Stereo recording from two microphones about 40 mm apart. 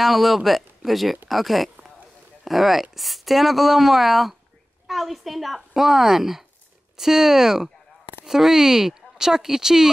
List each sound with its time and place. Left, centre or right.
0.0 s a woman's voice: centre